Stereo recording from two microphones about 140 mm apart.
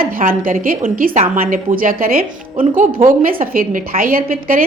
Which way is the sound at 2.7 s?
75° right (ahead or behind).